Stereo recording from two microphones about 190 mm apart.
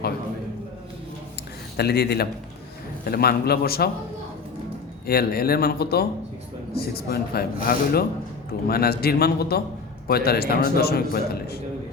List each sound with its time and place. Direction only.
1.7 s a man's voice: 60° left (ahead or behind)
5.0 s a man's voice: 55° left (ahead or behind)